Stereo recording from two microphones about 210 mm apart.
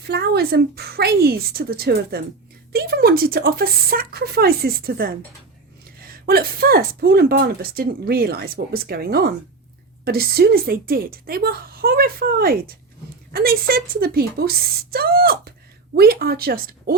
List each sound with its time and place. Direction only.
0.0 s speech: 50° right (ahead or behind)